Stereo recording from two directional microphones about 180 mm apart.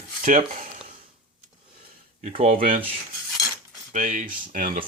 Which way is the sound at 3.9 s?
45° right (ahead or behind).